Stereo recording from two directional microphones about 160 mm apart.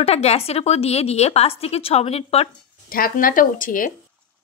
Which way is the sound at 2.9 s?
65° left (ahead or behind).